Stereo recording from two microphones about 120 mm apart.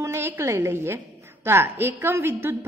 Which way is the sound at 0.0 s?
20° right (ahead or behind).